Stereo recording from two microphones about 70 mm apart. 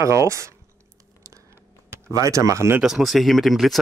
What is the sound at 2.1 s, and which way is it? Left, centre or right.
Speech, right.